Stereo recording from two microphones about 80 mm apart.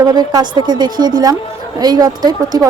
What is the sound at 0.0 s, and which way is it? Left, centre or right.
A woman's voice, right.